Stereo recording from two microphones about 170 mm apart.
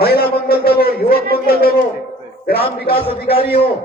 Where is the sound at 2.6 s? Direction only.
30° left (ahead or behind).